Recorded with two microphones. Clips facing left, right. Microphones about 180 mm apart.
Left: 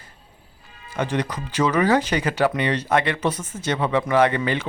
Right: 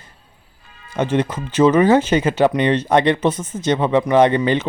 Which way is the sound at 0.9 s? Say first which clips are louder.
Right 5 dB; 25° right (ahead or behind).